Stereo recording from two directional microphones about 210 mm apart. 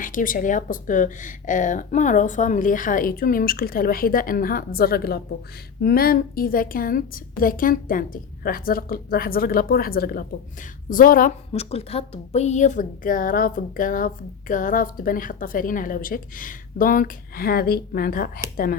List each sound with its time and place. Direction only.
0.0 s a woman's voice: 40° left (ahead or behind)
11.5 s a woman's voice: 30° left (ahead or behind)